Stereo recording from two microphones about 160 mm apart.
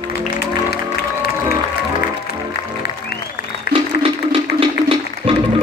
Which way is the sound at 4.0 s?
35° right (ahead or behind).